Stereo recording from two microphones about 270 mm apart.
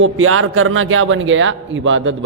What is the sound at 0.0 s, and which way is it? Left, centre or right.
A man's voice, right.